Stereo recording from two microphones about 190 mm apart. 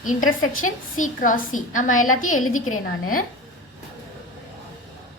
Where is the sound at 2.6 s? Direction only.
90° left.